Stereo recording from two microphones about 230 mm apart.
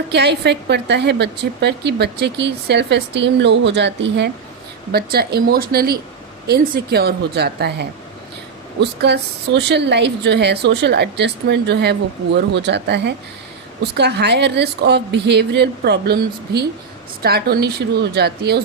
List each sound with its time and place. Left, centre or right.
0.1 s speech: right